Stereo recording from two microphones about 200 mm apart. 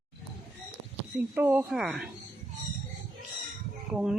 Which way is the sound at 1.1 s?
10° right (ahead or behind).